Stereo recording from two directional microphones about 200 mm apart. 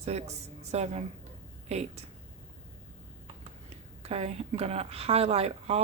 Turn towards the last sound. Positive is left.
turn(degrees=-30)  # may be behind; listen again after turning